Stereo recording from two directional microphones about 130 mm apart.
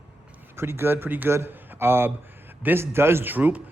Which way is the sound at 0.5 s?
20° right (ahead or behind).